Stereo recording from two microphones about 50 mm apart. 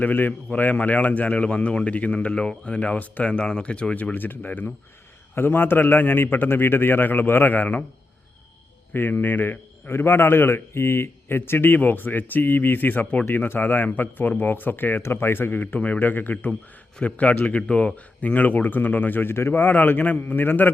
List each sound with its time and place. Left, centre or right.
0.0 s speech: left
3.2 s speech: centre
4.1 s a man's voice: left
8.9 s a man's voice: left
17.2 s speech: left